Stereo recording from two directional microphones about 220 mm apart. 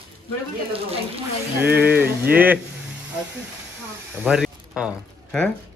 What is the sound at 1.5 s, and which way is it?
Speech, 10° right (ahead or behind).